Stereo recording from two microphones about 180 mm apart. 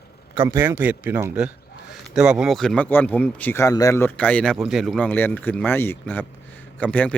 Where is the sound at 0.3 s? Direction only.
15° right (ahead or behind).